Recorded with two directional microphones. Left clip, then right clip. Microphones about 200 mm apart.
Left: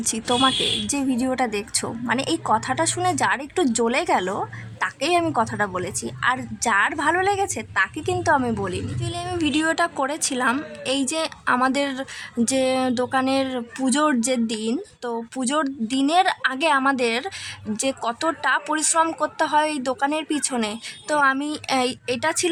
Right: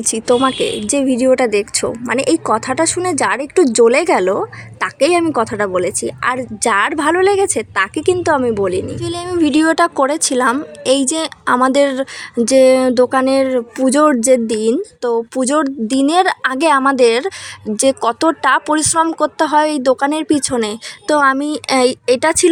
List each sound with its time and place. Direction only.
0.0 s a woman's voice: 20° right (ahead or behind)